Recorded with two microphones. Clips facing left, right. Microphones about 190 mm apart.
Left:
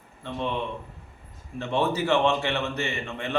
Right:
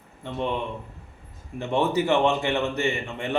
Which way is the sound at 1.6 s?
15° right (ahead or behind).